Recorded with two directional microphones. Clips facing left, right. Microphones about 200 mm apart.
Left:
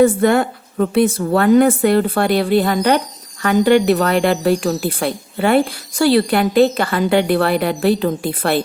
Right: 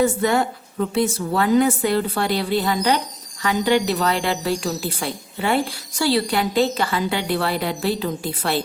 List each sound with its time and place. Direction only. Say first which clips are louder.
0.0 s a woman's voice: left 6 dB; 55° left (ahead or behind)